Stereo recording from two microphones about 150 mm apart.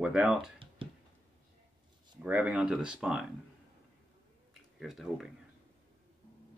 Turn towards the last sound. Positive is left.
turn(degrees=0)  # may be behind; listen again after turning